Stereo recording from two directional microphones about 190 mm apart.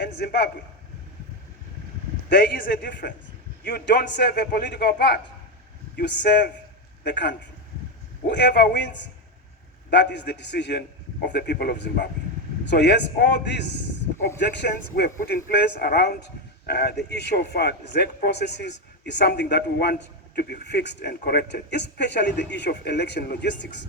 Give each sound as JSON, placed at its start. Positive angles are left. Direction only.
{"t": 0.0, "sound": "a man's voice", "side_deg": 50}
{"t": 2.3, "sound": "speech", "side_deg": 50}
{"t": 3.6, "sound": "a man's voice", "side_deg": 65}